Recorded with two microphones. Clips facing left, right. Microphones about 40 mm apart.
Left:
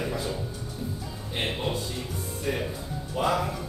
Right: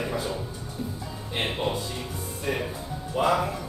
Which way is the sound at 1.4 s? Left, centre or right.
Centre.